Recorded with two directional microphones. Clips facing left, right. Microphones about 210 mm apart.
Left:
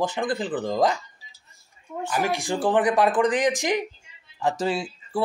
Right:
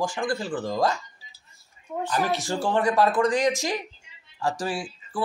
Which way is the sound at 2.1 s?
15° left (ahead or behind).